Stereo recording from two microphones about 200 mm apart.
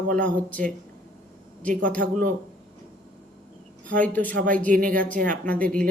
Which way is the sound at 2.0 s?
65° right (ahead or behind).